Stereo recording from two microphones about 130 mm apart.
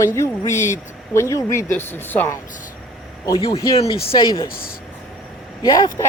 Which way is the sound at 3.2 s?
25° left (ahead or behind).